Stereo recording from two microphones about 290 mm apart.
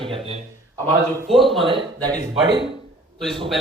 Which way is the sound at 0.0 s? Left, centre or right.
Centre.